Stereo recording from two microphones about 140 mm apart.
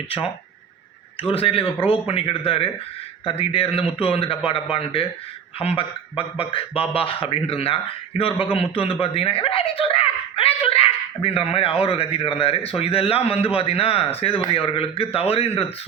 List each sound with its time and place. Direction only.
1.3 s a man's voice: 40° left (ahead or behind)